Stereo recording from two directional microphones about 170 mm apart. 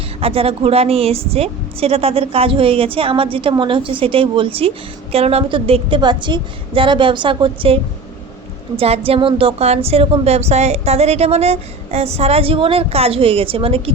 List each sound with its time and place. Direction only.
0.2 s a woman's voice: 35° right (ahead or behind)
8.8 s a woman's voice: 35° right (ahead or behind)